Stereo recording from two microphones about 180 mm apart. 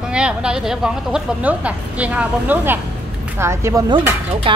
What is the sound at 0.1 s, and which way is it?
A woman's voice, 5° right (ahead or behind).